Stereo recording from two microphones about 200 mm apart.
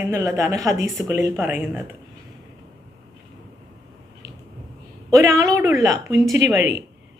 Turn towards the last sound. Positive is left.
turn(degrees=30)  # may be behind; listen again after turning